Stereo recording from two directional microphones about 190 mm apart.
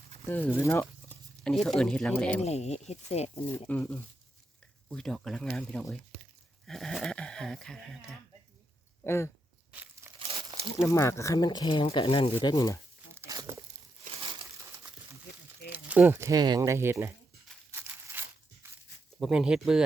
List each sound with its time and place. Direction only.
0.3 s speech: 10° left (ahead or behind)
1.5 s speech: centre (ahead or behind)
2.4 s speech: 35° left (ahead or behind)
3.5 s speech: 10° left (ahead or behind)
9.0 s speech: 15° left (ahead or behind)
9.7 s a sound: 10° right (ahead or behind)
10.2 s crumpling: 30° right (ahead or behind)
10.8 s speech: 15° left (ahead or behind)
13.1 s crumpling: 15° right (ahead or behind)
14.1 s crushing: 30° right (ahead or behind)
15.7 s speech: 10° right (ahead or behind)
17.7 s a sound: 10° right (ahead or behind)
19.2 s speech: 5° right (ahead or behind)